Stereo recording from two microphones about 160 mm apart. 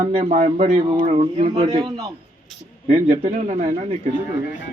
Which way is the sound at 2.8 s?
45° right (ahead or behind).